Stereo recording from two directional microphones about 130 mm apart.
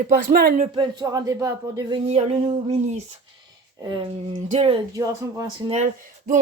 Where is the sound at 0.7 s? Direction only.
35° right (ahead or behind).